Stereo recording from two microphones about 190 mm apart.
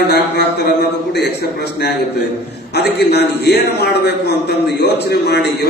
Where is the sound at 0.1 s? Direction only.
60° left (ahead or behind).